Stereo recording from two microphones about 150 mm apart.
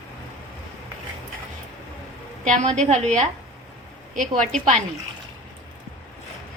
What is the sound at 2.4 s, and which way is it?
Speech, 55° right (ahead or behind).